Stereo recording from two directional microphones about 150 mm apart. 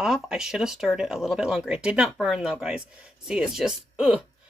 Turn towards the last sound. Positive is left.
turn(degrees=-5)  # may be behind; listen again after turning